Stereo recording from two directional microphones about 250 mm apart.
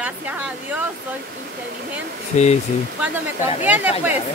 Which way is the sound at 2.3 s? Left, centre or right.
Left.